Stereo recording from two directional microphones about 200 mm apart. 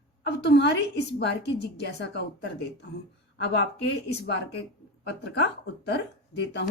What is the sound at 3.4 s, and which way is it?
Speech, 60° left (ahead or behind).